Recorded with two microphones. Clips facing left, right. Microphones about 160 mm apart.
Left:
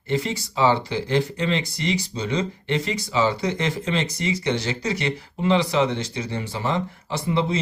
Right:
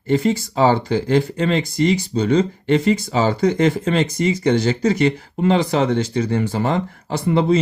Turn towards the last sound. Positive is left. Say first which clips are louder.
# right 5 dB
turn(degrees=-55)  # may be behind; listen again after turning